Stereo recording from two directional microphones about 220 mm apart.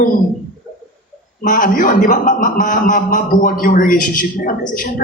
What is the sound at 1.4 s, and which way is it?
A man's voice, 35° left (ahead or behind).